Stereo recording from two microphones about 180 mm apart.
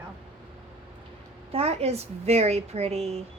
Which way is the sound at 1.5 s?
35° right (ahead or behind).